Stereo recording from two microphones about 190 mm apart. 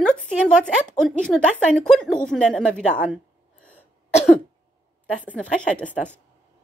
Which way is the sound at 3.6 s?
5° left (ahead or behind).